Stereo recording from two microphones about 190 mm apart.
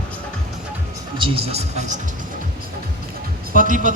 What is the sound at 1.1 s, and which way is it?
Speech, 30° right (ahead or behind).